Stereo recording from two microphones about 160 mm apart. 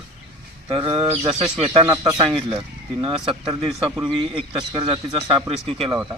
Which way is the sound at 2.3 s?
30° right (ahead or behind).